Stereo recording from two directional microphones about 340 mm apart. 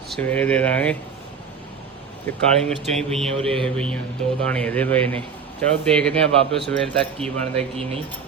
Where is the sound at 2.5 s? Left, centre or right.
Centre.